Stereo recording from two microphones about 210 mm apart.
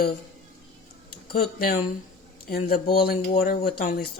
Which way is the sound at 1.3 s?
45° left (ahead or behind).